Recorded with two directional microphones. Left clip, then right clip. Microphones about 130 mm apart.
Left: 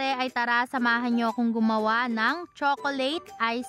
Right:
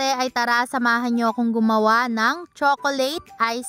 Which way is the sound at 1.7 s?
45° right (ahead or behind).